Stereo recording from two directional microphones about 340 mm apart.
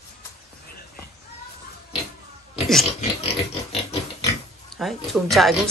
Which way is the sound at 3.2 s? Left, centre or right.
Centre.